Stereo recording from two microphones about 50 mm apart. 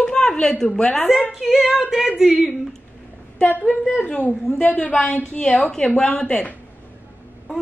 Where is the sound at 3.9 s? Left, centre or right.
Left.